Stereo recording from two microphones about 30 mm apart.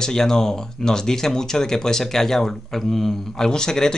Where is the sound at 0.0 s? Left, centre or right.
Centre.